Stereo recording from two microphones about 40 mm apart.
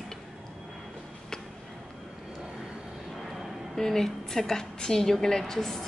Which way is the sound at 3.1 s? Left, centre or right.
Centre.